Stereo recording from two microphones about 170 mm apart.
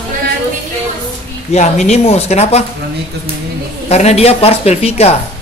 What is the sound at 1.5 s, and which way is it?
Speech, 40° left (ahead or behind).